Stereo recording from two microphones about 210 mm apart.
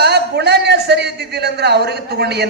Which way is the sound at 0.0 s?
50° right (ahead or behind).